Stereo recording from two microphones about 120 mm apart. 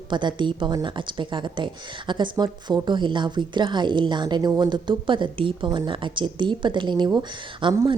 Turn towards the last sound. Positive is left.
turn(degrees=-45)  # may be behind; listen again after turning